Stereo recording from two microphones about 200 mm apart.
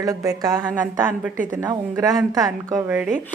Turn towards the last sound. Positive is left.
turn(degrees=-5)  # may be behind; listen again after turning